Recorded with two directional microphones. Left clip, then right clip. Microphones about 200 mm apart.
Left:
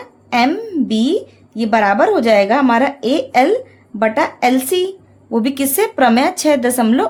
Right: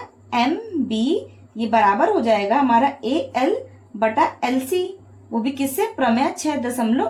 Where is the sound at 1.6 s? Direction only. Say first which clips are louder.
Left 4 dB; 60° left (ahead or behind).